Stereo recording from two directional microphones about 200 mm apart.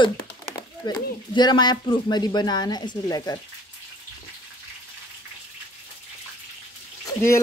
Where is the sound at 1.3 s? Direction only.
20° left (ahead or behind).